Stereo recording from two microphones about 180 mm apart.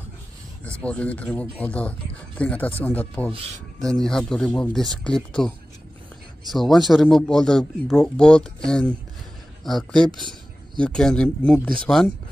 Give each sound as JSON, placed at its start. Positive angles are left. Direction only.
{"t": 0.8, "sound": "a man's voice", "side_deg": 10}
{"t": 6.5, "sound": "a man's voice", "side_deg": 0}
{"t": 9.9, "sound": "speech", "side_deg": -25}
{"t": 10.8, "sound": "a man's voice", "side_deg": 5}